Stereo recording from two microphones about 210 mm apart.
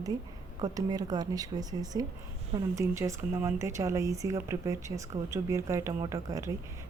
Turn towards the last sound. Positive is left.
turn(degrees=-15)  # may be behind; listen again after turning